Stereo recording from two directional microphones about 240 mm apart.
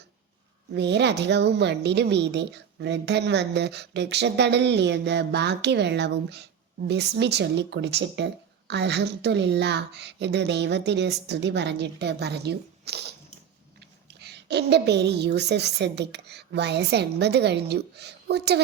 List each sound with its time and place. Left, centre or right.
0.7 s a woman's voice: right
14.2 s a woman's voice: right